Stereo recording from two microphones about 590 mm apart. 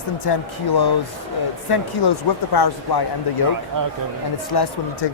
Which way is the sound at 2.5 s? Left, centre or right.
Left.